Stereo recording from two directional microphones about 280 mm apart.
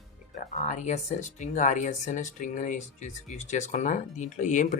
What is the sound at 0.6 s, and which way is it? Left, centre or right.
Speech, left.